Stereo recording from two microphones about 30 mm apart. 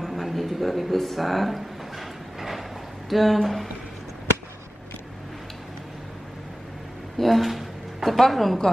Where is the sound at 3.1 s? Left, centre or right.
Centre.